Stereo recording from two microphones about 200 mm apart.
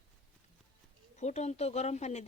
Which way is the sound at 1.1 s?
35° left (ahead or behind).